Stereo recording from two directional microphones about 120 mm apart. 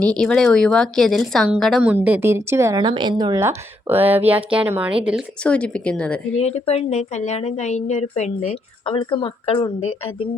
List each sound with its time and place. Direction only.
0.0 s a woman's voice: 5° left (ahead or behind)
1.8 s speech: 10° right (ahead or behind)
2.7 s a woman's voice: 40° right (ahead or behind)
3.3 s speech: 20° right (ahead or behind)
5.4 s a woman's voice: 10° left (ahead or behind)
6.4 s a woman's voice: 60° left (ahead or behind)
8.9 s speech: 45° left (ahead or behind)